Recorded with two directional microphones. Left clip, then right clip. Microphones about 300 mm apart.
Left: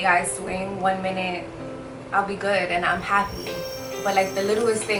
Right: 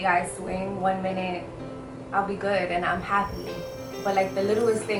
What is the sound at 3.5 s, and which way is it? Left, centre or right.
Speech, centre.